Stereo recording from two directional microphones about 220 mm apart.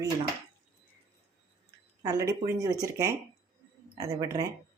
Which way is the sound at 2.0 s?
15° right (ahead or behind).